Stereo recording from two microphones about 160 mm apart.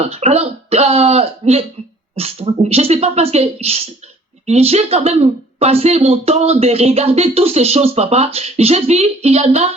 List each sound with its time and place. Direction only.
0.0 s speech: 40° right (ahead or behind)